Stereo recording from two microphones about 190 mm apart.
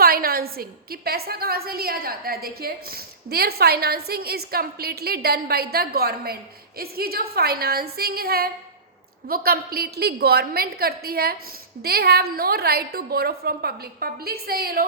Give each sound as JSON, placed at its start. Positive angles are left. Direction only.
{"t": 0.0, "sound": "a woman's voice", "side_deg": -50}